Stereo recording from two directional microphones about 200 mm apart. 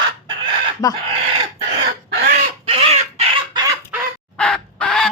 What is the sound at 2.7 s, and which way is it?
Chicken, 30° right (ahead or behind).